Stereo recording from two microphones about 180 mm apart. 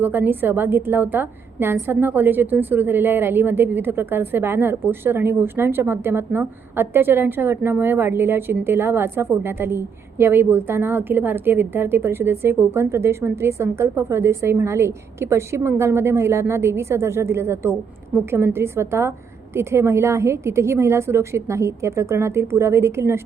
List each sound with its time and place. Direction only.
0.0 s a woman's voice: 10° right (ahead or behind)